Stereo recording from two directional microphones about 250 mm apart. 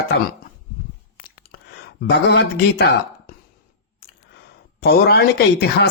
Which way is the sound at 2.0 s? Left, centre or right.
Left.